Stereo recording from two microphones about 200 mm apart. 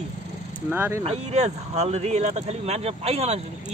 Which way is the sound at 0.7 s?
10° right (ahead or behind).